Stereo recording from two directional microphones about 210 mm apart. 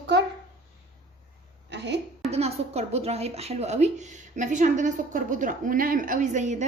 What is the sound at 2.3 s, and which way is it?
A woman's voice, 30° right (ahead or behind).